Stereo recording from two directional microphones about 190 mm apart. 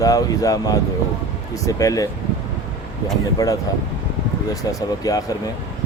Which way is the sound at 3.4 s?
20° left (ahead or behind).